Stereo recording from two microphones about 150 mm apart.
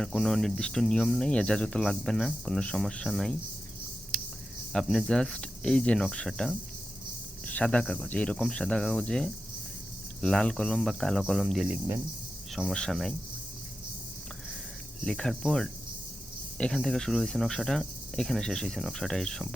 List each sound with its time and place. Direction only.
0.0 s speech: 5° left (ahead or behind)
4.7 s speech: 5° left (ahead or behind)
15.0 s speech: 5° left (ahead or behind)